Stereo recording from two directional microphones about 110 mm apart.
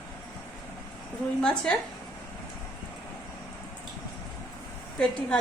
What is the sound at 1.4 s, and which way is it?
Speech, 10° left (ahead or behind).